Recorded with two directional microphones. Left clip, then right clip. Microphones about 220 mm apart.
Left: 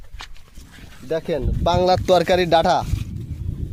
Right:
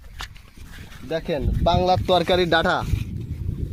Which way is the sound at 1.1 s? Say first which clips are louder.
Left 2 dB; 35° left (ahead or behind).